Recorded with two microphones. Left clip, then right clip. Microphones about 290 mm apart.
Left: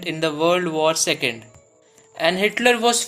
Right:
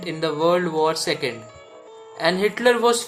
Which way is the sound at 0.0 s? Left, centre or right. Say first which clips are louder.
Left 1 dB; left.